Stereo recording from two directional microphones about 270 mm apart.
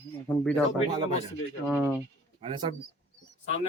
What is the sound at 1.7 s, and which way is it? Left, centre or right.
Speech, centre.